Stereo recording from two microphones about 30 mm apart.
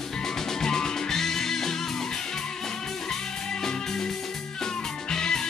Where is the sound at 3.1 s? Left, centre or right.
Centre.